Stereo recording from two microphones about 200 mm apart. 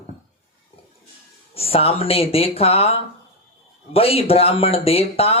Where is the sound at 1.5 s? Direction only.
30° left (ahead or behind).